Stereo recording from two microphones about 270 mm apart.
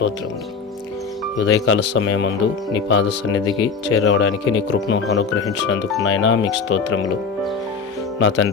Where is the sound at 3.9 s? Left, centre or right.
Left.